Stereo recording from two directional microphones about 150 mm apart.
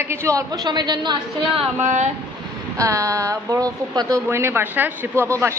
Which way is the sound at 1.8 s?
55° right (ahead or behind).